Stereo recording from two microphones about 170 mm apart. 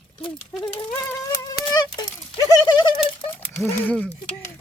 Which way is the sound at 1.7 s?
25° left (ahead or behind).